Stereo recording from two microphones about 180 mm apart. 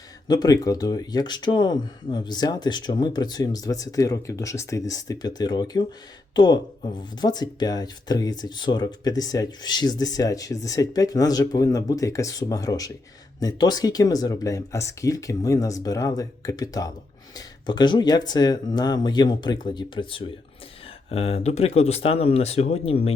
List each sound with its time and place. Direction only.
0.3 s speech: 20° left (ahead or behind)